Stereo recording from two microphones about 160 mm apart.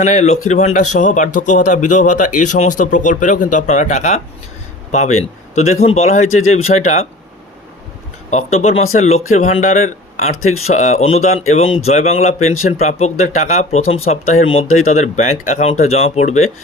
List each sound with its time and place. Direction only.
0.0 s speech: 50° left (ahead or behind)
8.3 s speech: 45° left (ahead or behind)